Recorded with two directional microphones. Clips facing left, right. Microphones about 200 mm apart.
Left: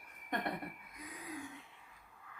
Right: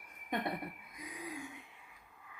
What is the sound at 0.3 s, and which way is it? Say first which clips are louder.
Speech: right 2 dB; 10° right (ahead or behind).